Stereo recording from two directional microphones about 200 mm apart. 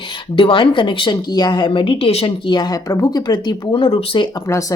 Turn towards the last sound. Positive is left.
turn(degrees=15)  # may be behind; listen again after turning